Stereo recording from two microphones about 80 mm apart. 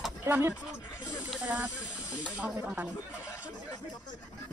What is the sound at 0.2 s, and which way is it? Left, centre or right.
Speech, right.